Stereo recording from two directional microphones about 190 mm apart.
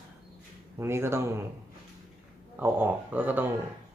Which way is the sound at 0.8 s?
15° right (ahead or behind).